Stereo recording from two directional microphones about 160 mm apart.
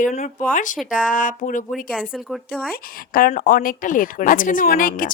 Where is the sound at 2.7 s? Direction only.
60° left (ahead or behind).